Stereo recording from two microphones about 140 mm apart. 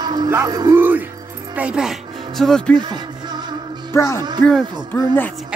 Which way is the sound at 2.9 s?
30° right (ahead or behind).